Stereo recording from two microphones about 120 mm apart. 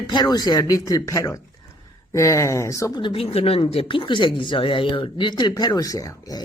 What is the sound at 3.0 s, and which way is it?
Speech, 55° left (ahead or behind).